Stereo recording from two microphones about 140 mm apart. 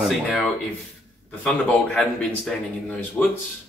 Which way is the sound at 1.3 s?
Centre (ahead or behind).